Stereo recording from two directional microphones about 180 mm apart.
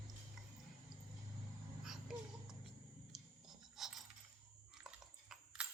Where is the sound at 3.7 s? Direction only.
Centre (ahead or behind).